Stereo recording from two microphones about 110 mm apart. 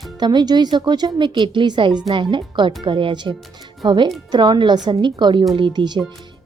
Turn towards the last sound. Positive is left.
turn(degrees=-40)  # may be behind; listen again after turning